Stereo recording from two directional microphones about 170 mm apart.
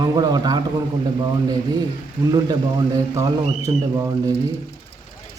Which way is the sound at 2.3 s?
25° right (ahead or behind).